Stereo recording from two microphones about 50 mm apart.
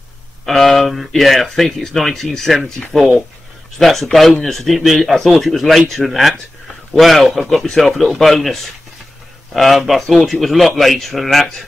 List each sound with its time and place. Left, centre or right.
0.5 s speech: centre